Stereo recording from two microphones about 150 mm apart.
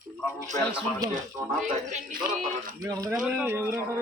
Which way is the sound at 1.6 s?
55° right (ahead or behind).